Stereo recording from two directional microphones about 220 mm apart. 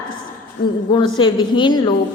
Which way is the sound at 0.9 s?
20° left (ahead or behind).